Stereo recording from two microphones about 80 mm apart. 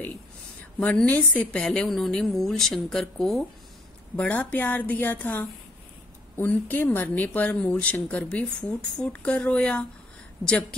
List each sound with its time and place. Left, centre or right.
0.7 s a woman's voice: centre
4.2 s a woman's voice: centre